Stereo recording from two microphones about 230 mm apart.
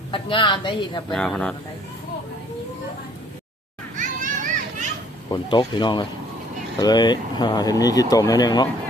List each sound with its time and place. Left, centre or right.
0.1 s a woman's voice: left
1.1 s speech: centre
3.9 s children playing: right
5.3 s a woman's voice: centre